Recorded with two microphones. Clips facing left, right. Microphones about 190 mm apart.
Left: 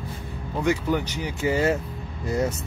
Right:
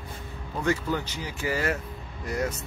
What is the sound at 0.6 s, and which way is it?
Speech, 15° left (ahead or behind).